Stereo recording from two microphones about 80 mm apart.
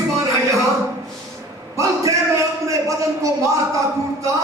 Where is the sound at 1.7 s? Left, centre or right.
Right.